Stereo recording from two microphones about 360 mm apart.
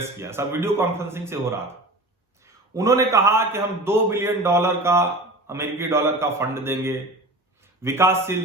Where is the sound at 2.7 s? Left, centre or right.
Centre.